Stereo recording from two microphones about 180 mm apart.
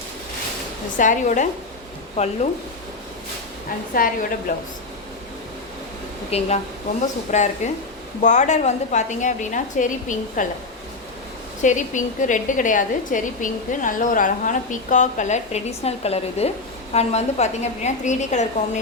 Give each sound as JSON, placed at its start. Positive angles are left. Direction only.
{"t": 0.9, "sound": "a woman's voice", "side_deg": 45}
{"t": 3.9, "sound": "a woman's voice", "side_deg": 50}
{"t": 6.3, "sound": "a woman's voice", "side_deg": 35}
{"t": 11.6, "sound": "a woman's voice", "side_deg": 45}